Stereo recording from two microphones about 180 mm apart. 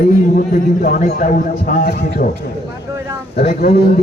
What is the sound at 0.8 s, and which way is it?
A man's voice, 50° left (ahead or behind).